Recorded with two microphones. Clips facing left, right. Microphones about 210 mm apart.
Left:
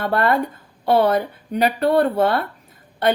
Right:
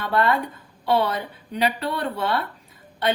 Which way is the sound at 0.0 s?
50° left (ahead or behind).